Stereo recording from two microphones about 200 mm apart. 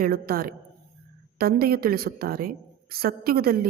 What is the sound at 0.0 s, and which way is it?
A woman's voice, 50° right (ahead or behind).